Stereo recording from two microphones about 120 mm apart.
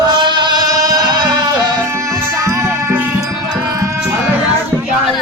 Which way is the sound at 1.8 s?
20° right (ahead or behind).